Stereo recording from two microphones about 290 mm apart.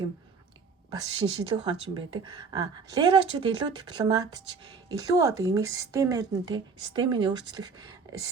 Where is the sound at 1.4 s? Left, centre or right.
Centre.